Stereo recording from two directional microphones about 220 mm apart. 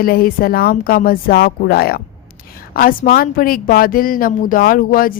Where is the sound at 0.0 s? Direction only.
40° left (ahead or behind).